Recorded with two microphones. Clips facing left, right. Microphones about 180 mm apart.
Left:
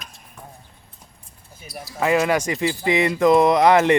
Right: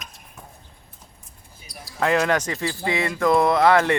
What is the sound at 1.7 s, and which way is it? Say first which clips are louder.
Speech: left 2 dB; 5° left (ahead or behind).